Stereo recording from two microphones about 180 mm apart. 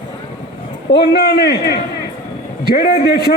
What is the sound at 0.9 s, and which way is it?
Speech, 65° left (ahead or behind).